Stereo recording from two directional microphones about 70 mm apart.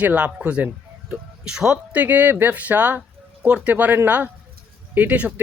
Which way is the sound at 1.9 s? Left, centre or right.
Right.